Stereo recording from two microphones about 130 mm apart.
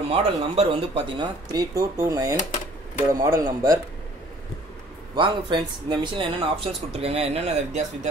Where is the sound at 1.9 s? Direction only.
25° right (ahead or behind).